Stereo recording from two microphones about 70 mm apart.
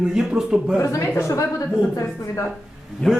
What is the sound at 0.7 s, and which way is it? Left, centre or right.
Speech, left.